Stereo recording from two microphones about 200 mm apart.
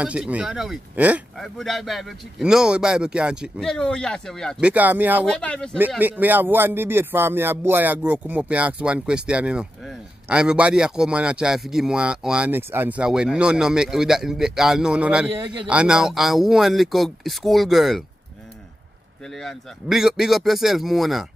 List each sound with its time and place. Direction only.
0.0 s speech: 5° right (ahead or behind)
5.2 s speech: 5° left (ahead or behind)
5.9 s speech: 10° right (ahead or behind)
15.3 s a man's voice: 20° right (ahead or behind)
15.7 s speech: 5° right (ahead or behind)
19.4 s speech: centre (ahead or behind)